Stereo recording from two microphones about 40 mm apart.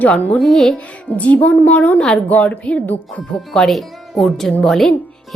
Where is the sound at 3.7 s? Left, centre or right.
Centre.